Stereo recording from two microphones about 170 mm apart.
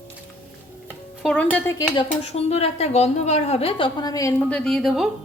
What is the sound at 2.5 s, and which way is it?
A woman's voice, 40° left (ahead or behind).